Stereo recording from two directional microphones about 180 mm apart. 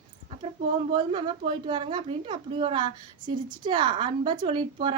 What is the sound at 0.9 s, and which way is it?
A woman's voice, 30° right (ahead or behind).